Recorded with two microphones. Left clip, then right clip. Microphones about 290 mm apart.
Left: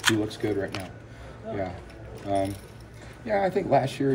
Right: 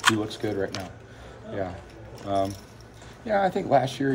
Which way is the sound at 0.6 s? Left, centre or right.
Centre.